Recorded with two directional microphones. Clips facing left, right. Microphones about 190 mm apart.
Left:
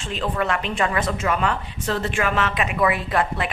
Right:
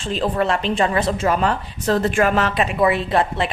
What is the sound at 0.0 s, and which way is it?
Speech, 35° right (ahead or behind).